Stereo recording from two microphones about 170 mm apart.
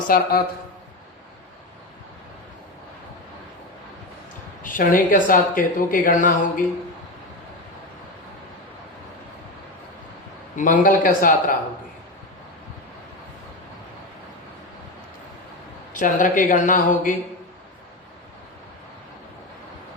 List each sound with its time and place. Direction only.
0.0 s a man's voice: 60° left (ahead or behind)
4.6 s a woman's voice: 55° left (ahead or behind)
10.6 s a woman's voice: 50° left (ahead or behind)
15.9 s a woman's voice: 50° left (ahead or behind)